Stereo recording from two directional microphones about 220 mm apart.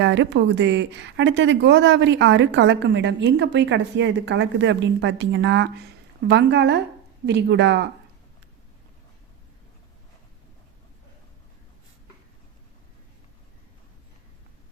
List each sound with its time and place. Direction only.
0.0 s speech: 55° right (ahead or behind)